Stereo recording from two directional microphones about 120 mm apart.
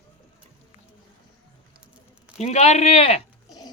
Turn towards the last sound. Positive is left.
turn(degrees=60)  # may be behind; listen again after turning